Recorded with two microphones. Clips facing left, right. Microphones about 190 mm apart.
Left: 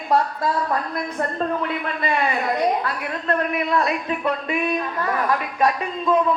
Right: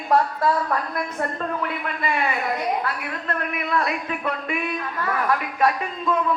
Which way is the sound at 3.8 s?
25° left (ahead or behind).